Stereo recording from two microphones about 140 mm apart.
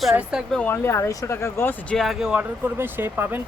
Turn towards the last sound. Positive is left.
turn(degrees=-15)  # may be behind; listen again after turning